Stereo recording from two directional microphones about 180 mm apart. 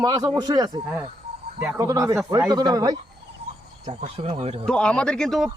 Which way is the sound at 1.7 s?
15° right (ahead or behind).